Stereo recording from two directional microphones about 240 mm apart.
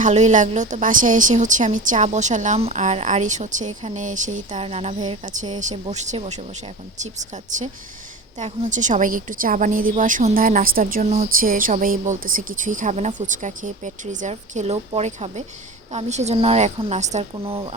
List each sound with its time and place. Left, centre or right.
0.0 s a woman's voice: right